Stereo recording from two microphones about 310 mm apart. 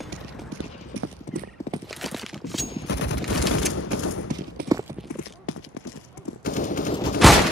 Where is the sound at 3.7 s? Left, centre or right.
Left.